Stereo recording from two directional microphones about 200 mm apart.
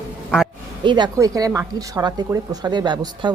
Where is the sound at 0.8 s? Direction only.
25° right (ahead or behind).